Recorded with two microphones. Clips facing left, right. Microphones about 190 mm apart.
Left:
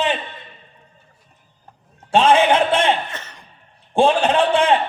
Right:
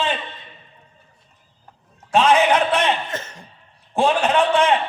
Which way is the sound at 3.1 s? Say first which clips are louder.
Right 5 dB; 45° right (ahead or behind).